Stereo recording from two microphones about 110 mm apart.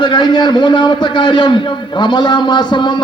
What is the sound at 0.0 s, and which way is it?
A man's voice, 45° left (ahead or behind).